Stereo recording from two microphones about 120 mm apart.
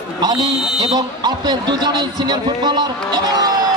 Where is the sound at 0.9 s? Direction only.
35° right (ahead or behind).